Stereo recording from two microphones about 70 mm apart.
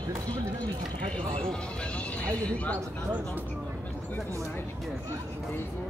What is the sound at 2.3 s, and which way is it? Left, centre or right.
Speech, centre.